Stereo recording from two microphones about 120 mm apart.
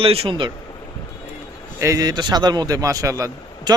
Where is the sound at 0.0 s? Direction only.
50° right (ahead or behind).